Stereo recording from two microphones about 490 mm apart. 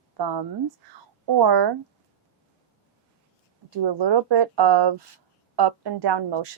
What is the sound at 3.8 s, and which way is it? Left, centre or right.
A woman's voice, right.